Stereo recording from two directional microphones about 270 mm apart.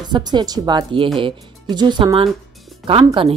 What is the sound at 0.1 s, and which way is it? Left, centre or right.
A woman's voice, centre.